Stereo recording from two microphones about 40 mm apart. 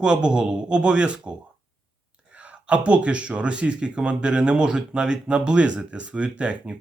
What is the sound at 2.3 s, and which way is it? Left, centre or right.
Speech, right.